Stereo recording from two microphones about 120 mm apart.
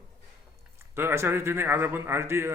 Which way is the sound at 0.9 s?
20° right (ahead or behind).